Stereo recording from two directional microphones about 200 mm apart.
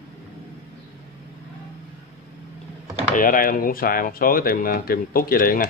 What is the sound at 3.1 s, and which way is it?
Speech, 45° left (ahead or behind).